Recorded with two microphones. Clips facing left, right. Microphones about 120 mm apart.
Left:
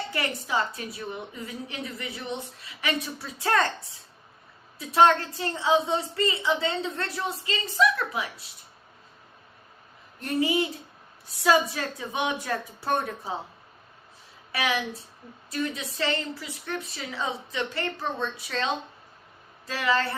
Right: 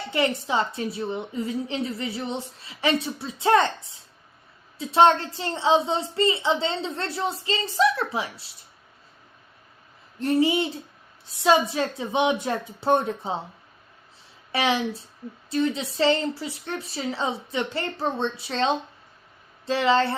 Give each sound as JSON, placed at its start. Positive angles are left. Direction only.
{"t": 0.1, "sound": "a woman's voice", "side_deg": -25}
{"t": 4.8, "sound": "a woman's voice", "side_deg": -25}
{"t": 10.2, "sound": "a woman's voice", "side_deg": -30}
{"t": 14.5, "sound": "a woman's voice", "side_deg": -25}